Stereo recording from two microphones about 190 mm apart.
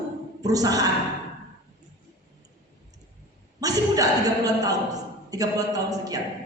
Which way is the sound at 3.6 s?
20° right (ahead or behind).